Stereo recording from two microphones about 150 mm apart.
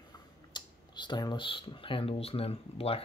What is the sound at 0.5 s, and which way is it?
Speech, 30° left (ahead or behind).